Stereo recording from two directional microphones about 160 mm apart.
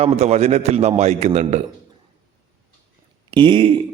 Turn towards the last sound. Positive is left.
turn(degrees=-30)  # may be behind; listen again after turning